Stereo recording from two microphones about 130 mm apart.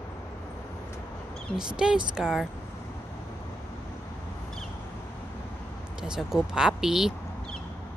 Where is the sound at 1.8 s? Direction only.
5° right (ahead or behind).